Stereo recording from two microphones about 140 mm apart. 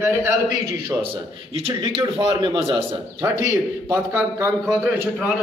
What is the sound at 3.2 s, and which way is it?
A man's voice, 20° right (ahead or behind).